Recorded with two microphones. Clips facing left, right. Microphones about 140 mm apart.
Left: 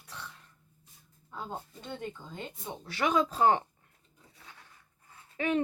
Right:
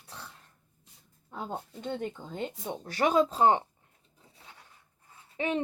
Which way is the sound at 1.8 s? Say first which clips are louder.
Right 8 dB; 55° right (ahead or behind).